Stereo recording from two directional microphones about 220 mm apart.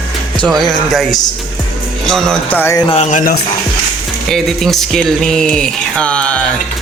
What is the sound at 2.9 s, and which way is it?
Speech, 30° left (ahead or behind).